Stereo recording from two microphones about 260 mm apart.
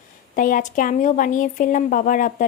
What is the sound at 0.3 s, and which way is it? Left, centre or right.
A woman's voice, left.